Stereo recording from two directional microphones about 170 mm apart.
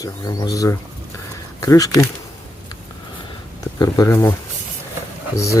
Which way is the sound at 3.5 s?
20° left (ahead or behind).